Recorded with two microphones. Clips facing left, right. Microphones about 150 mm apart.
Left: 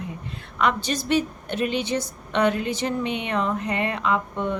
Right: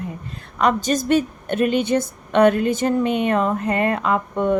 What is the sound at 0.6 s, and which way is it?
A woman's voice, 45° right (ahead or behind).